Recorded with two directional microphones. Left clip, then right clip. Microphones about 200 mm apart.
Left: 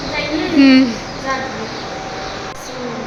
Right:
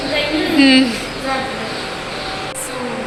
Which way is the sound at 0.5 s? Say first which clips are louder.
Left 1 dB; 25° left (ahead or behind).